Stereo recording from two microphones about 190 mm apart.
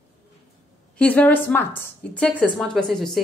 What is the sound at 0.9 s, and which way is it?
A woman's voice, 10° left (ahead or behind).